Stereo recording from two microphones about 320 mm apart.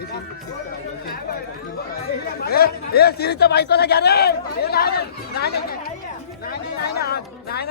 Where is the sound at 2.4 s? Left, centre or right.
Left.